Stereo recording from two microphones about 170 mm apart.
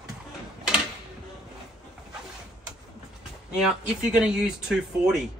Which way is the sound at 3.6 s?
5° right (ahead or behind).